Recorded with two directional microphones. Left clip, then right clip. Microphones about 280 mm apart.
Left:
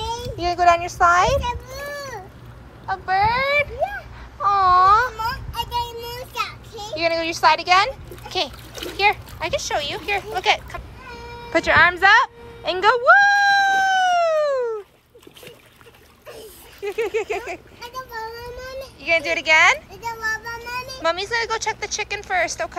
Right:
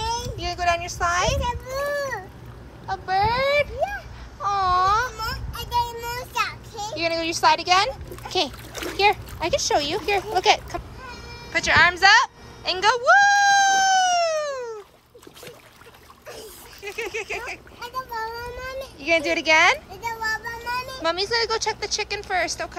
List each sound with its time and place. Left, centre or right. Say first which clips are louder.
0.0 s children playing: left 2 dB; centre
2.9 s speech: left 3 dB; centre
3.8 s babbling: left 2 dB; centre
5.1 s child singing: left 5 dB; centre
6.7 s a child's voice: left 3 dB; centre
11.5 s music: left 2 dB; centre
16.8 s a sound: left 6 dB; centre
18.9 s speech: left 1 dB; centre
19.9 s child singing: left 1 dB; centre
21.0 s speech: left 2 dB; centre